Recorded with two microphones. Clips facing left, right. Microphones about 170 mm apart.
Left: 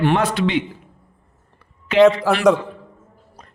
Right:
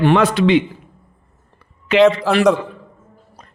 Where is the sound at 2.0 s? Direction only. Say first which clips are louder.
Right 1 dB; centre (ahead or behind).